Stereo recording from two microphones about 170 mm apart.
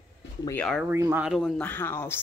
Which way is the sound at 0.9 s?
15° right (ahead or behind).